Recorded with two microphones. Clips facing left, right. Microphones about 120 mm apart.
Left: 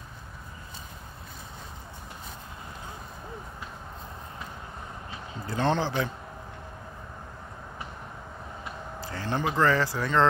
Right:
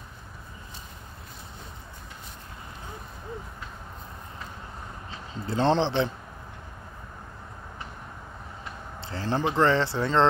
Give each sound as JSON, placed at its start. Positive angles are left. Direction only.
{"t": 5.5, "sound": "speech", "side_deg": -25}
{"t": 9.0, "sound": "speech", "side_deg": -30}